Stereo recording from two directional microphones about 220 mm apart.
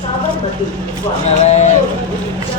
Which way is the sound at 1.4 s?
30° left (ahead or behind).